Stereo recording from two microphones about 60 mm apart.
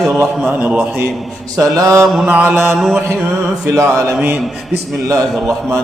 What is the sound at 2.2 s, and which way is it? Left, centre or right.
Speech, right.